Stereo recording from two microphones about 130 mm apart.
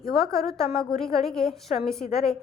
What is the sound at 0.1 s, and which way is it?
A woman's voice, centre (ahead or behind).